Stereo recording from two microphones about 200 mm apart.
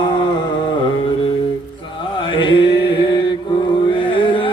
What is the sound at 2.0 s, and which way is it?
Mantra, 25° left (ahead or behind).